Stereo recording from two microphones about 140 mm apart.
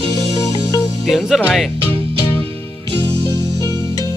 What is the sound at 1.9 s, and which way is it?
Music, 40° right (ahead or behind).